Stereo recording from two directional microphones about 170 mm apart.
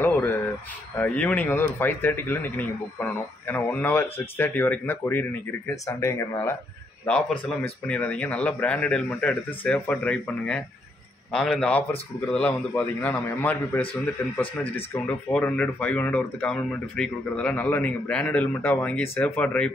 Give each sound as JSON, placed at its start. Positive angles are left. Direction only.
{"t": 0.0, "sound": "a sound", "side_deg": 10}
{"t": 0.9, "sound": "speech", "side_deg": 10}
{"t": 7.1, "sound": "speech", "side_deg": 5}
{"t": 14.6, "sound": "speech", "side_deg": 10}